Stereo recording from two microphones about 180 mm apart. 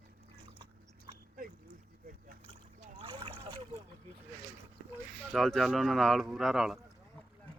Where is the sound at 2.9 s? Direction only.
25° right (ahead or behind).